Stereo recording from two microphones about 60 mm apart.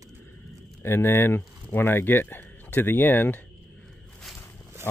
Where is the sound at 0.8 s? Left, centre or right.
Left.